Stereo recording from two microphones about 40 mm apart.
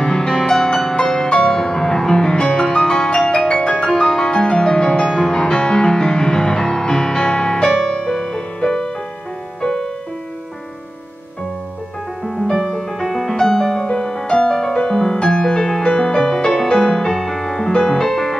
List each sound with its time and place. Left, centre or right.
0.0 s music: centre
5.5 s music: left
7.6 s music: centre
12.3 s music: centre
13.3 s music: centre